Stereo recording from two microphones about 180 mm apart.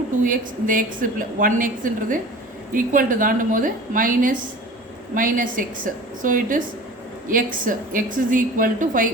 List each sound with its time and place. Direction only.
0.2 s a woman's voice: 50° right (ahead or behind)